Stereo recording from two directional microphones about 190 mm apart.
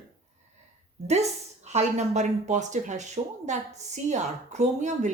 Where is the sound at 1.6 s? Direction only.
35° right (ahead or behind).